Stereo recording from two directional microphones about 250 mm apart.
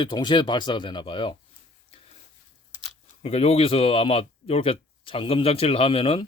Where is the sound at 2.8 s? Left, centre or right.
Left.